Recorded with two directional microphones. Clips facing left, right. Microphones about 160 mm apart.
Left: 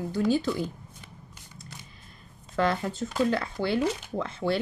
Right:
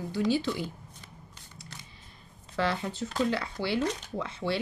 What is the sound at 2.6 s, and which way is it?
Speech, 45° left (ahead or behind).